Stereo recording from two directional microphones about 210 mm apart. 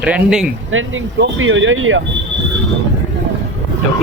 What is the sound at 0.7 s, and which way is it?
Speech, 70° right (ahead or behind).